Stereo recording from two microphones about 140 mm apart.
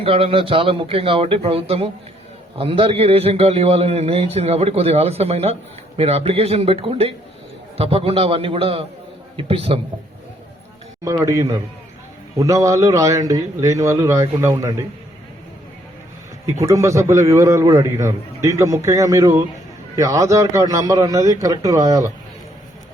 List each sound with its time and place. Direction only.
0.0 s a man's voice: 45° right (ahead or behind)
11.0 s a man's voice: 20° right (ahead or behind)
16.5 s a man's voice: 20° right (ahead or behind)